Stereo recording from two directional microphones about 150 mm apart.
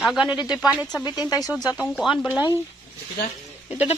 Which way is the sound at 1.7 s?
Centre (ahead or behind).